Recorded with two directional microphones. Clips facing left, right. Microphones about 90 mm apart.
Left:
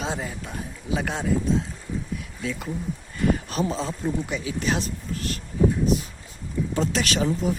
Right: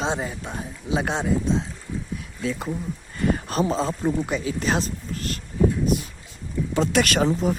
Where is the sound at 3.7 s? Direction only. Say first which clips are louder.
Right 4 dB; 40° right (ahead or behind).